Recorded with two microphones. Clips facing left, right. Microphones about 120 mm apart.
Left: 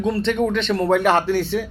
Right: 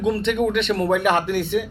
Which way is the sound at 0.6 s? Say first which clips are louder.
Even; 25° left (ahead or behind).